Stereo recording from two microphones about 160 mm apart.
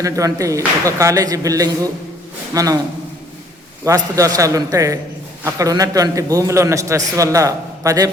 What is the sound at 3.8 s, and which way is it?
A man's voice, 20° right (ahead or behind).